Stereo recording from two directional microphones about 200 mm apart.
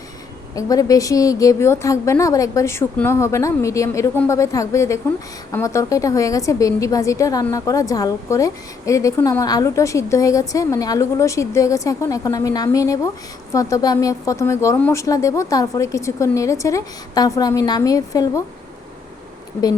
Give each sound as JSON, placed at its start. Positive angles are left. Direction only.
{"t": 0.5, "sound": "a woman's voice", "side_deg": 15}